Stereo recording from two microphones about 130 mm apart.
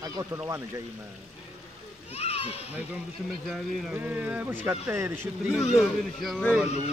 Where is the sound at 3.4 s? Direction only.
Centre (ahead or behind).